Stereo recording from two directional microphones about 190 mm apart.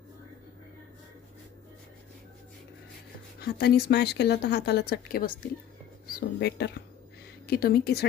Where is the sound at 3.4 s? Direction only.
55° left (ahead or behind).